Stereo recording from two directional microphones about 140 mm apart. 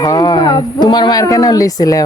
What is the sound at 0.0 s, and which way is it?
Speech, 25° left (ahead or behind).